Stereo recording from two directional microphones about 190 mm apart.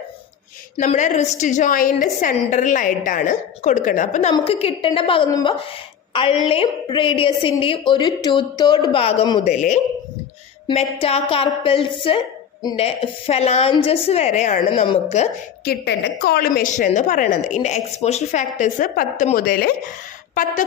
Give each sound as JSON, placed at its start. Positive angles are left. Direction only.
{"t": 0.9, "sound": "a woman's voice", "side_deg": 40}
{"t": 15.6, "sound": "a woman's voice", "side_deg": 55}
{"t": 16.7, "sound": "a woman's voice", "side_deg": 40}